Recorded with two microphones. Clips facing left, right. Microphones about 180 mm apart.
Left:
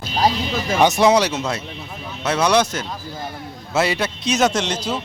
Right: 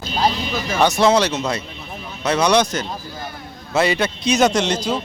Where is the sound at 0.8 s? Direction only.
15° left (ahead or behind).